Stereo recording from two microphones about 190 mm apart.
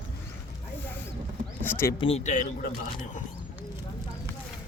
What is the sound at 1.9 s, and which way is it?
Speech, 30° left (ahead or behind).